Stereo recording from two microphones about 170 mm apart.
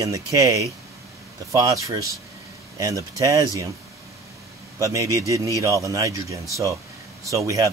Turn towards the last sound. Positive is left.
turn(degrees=-20)  # may be behind; listen again after turning